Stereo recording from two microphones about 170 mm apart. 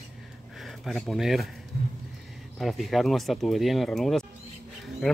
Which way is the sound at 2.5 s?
Centre (ahead or behind).